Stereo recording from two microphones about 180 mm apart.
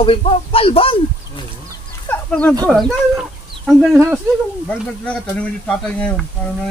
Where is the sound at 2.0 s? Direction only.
10° left (ahead or behind).